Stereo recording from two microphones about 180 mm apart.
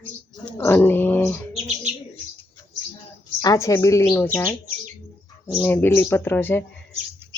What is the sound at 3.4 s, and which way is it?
Speech, 20° left (ahead or behind).